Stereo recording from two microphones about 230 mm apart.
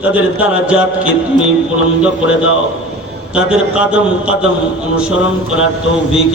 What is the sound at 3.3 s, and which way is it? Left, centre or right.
A man's voice, centre.